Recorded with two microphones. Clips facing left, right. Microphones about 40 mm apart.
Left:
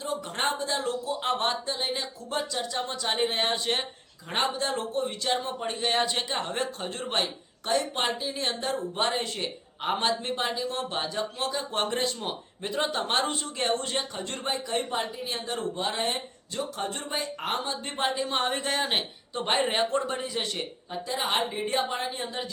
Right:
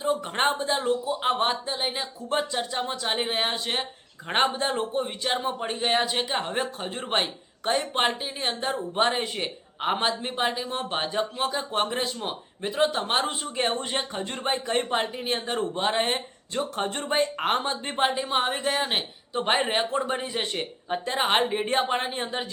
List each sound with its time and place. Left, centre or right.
0.0 s speech: right
2.3 s speech: right; by 3.8 s centre
4.3 s speech: right
4.7 s speech: centre
14.4 s speech: right
20.9 s speech: right